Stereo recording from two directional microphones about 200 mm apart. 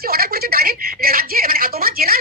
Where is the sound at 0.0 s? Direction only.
50° right (ahead or behind).